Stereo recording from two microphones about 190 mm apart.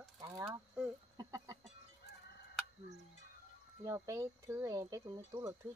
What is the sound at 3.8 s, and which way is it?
Speech, 15° right (ahead or behind).